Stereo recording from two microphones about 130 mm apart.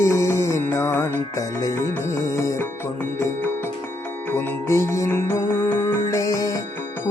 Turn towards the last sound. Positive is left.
turn(degrees=25)  # may be behind; listen again after turning